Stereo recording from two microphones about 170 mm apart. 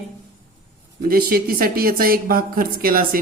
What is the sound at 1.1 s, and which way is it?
Speech, 60° right (ahead or behind).